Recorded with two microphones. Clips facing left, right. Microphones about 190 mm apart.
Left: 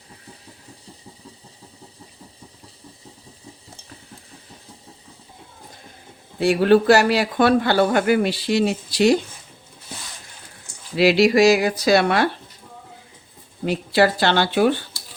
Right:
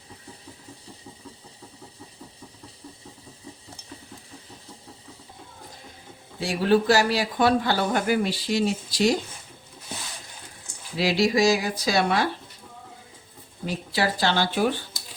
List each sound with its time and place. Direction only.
6.4 s speech: 65° left (ahead or behind)
10.9 s speech: 70° left (ahead or behind)
13.7 s speech: 65° left (ahead or behind)